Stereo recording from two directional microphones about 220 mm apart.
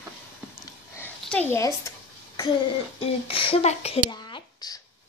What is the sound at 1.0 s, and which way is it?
Speech, 10° left (ahead or behind).